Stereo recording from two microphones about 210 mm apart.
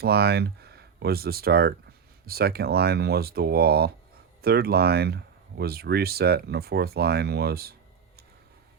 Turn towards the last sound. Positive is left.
turn(degrees=-45)  # may be behind; listen again after turning